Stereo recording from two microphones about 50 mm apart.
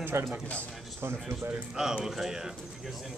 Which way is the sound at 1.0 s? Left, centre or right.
Right.